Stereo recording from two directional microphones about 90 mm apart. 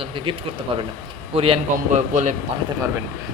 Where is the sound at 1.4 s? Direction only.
90° right.